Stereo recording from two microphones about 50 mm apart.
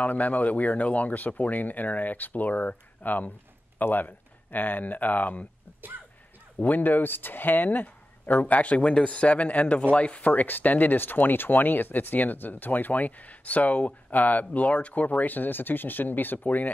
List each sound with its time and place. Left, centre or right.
0.0 s speech: left
6.6 s speech: left
10.3 s speech: left